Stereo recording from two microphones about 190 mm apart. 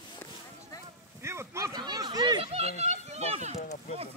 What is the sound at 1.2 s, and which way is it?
A child's voice, 15° right (ahead or behind).